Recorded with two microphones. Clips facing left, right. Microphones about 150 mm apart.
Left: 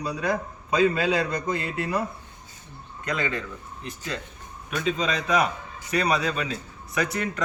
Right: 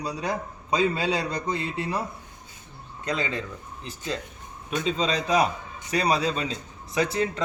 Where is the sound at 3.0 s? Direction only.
25° right (ahead or behind).